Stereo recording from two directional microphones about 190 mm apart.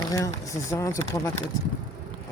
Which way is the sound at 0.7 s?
15° left (ahead or behind).